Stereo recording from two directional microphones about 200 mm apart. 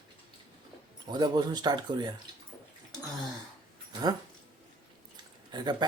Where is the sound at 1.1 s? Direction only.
20° right (ahead or behind).